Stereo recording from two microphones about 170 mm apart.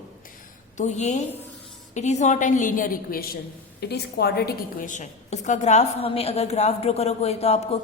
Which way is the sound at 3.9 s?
70° left (ahead or behind).